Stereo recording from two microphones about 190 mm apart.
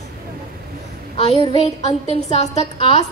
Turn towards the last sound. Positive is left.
turn(degrees=35)  # may be behind; listen again after turning